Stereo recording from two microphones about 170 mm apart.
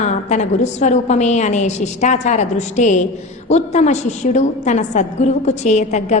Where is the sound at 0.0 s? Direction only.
45° left (ahead or behind).